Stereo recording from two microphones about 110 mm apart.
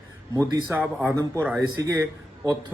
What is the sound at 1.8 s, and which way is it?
Speech, 35° right (ahead or behind).